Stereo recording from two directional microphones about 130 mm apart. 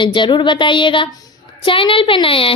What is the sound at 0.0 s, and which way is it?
A woman's voice, 40° left (ahead or behind).